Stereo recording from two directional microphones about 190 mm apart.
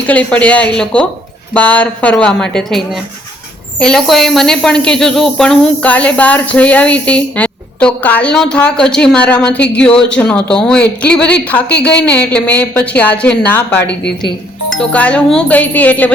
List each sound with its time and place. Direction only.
0.1 s a woman's voice: 5° left (ahead or behind)
13.8 s a woman's voice: 60° left (ahead or behind)
14.8 s a woman's voice: 5° left (ahead or behind)